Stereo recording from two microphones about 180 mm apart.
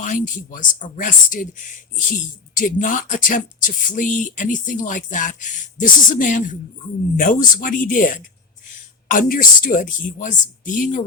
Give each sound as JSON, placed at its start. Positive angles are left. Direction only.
{"t": 0.0, "sound": "speech", "side_deg": 45}